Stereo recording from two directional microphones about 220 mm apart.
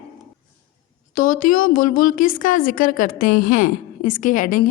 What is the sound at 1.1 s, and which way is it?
A woman's voice, 40° left (ahead or behind).